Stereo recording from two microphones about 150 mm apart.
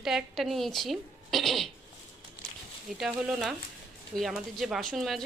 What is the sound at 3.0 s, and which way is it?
A woman's voice, 5° right (ahead or behind).